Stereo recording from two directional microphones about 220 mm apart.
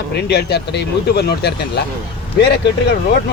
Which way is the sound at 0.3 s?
45° left (ahead or behind).